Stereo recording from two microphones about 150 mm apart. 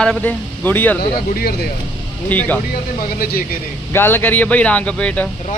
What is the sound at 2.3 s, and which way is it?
Speech, 10° left (ahead or behind).